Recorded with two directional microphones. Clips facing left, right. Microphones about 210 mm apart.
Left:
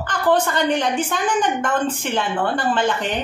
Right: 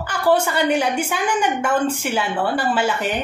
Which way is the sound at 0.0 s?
10° right (ahead or behind).